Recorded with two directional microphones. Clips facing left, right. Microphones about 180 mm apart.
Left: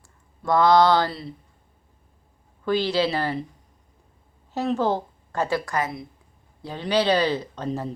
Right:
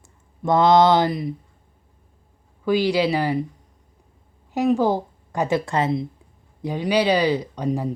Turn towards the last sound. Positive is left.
turn(degrees=-10)  # may be behind; listen again after turning